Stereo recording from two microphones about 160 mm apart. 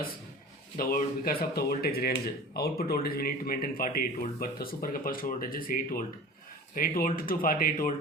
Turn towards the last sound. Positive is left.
turn(degrees=65)  # may be behind; listen again after turning